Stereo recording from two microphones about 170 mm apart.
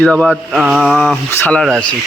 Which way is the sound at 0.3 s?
5° right (ahead or behind).